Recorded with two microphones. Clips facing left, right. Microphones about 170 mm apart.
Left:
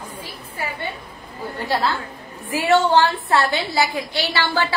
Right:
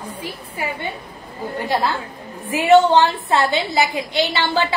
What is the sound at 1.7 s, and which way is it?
A woman's voice, 15° right (ahead or behind).